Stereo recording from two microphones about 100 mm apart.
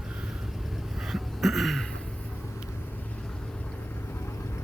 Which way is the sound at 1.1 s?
Centre (ahead or behind).